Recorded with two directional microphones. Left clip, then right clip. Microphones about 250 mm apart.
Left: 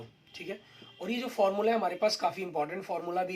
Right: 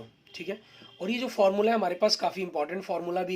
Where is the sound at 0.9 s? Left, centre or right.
Right.